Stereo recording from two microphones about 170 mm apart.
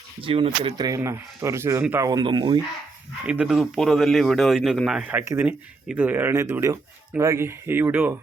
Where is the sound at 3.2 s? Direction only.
5° right (ahead or behind).